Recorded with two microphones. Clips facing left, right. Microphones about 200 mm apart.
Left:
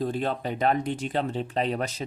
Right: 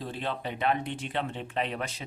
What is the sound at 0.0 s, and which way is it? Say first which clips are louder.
Speech: left 6 dB; 45° left (ahead or behind).